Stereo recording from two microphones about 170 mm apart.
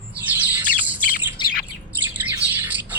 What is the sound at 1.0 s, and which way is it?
Bird, 55° left (ahead or behind).